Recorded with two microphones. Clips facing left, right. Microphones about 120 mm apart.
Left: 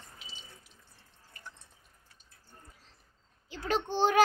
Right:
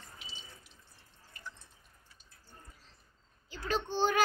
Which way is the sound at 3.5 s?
75° left (ahead or behind).